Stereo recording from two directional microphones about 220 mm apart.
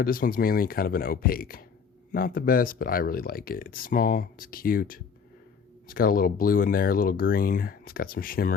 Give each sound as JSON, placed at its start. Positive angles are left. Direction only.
{"t": 0.0, "sound": "speech", "side_deg": 40}